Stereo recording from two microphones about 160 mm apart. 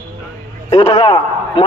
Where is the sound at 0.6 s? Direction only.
35° left (ahead or behind).